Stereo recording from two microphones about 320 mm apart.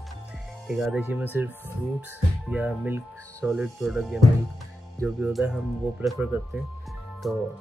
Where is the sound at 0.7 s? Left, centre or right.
Centre.